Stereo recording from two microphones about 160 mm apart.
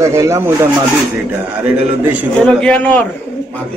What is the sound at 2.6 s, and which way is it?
Speech, 10° left (ahead or behind).